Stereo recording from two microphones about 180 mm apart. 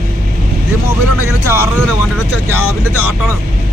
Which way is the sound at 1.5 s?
15° right (ahead or behind).